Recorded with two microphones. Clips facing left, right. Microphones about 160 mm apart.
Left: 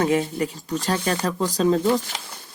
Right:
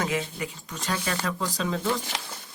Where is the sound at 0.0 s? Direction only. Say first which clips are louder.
Left 8 dB; 35° left (ahead or behind).